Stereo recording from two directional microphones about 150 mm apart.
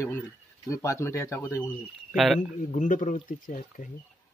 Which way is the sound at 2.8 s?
60° left (ahead or behind).